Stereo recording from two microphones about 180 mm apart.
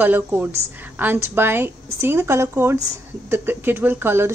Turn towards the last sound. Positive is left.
turn(degrees=-10)  # may be behind; listen again after turning